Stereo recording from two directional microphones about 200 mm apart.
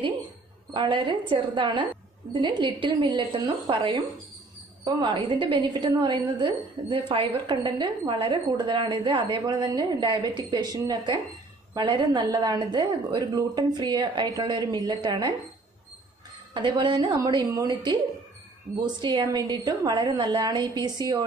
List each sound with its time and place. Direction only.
0.7 s a woman's voice: 25° right (ahead or behind)
16.5 s a woman's voice: 25° right (ahead or behind)